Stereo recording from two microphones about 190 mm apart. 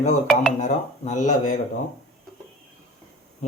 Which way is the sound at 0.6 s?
40° left (ahead or behind).